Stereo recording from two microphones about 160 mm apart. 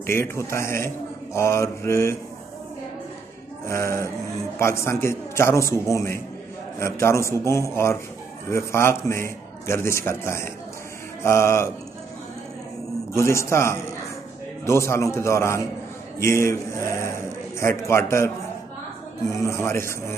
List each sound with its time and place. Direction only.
0.0 s a man's voice: 15° left (ahead or behind)
3.6 s a man's voice: 20° left (ahead or behind)
13.1 s a man's voice: 15° left (ahead or behind)
19.3 s a man's voice: 15° left (ahead or behind)